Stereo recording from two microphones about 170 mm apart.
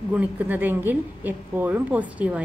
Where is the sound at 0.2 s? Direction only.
10° right (ahead or behind).